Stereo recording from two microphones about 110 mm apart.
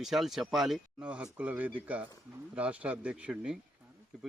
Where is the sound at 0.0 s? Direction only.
Centre (ahead or behind).